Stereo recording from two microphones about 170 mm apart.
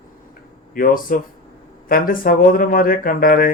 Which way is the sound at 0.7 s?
55° left (ahead or behind).